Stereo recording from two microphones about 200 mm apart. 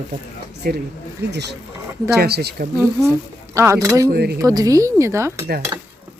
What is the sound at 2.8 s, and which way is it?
Speech, 15° right (ahead or behind).